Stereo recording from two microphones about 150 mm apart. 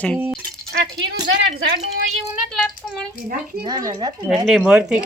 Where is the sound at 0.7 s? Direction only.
90° right.